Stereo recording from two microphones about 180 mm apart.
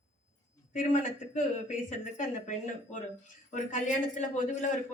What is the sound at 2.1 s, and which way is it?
A man's voice, 45° left (ahead or behind).